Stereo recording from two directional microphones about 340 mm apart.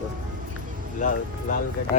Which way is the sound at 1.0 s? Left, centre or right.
Left.